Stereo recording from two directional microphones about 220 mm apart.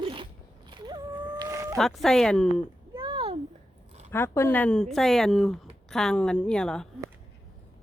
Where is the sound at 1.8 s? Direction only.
Centre (ahead or behind).